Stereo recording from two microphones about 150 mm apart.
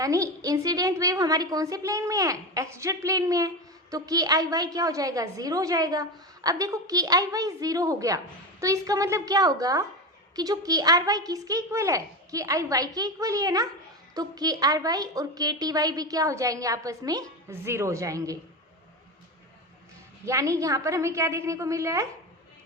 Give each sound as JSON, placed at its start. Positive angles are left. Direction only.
{"t": 0.0, "sound": "a woman's voice", "side_deg": -20}
{"t": 20.2, "sound": "a woman's voice", "side_deg": -20}